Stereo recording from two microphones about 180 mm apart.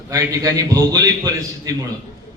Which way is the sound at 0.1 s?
20° right (ahead or behind).